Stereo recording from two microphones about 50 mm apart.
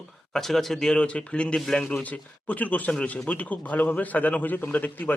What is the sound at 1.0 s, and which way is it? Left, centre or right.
A man's voice, left.